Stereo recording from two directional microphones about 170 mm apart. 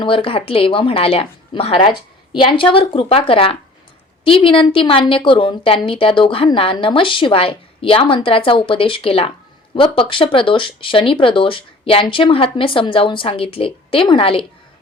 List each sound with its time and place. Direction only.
0.0 s a woman's voice: 30° left (ahead or behind)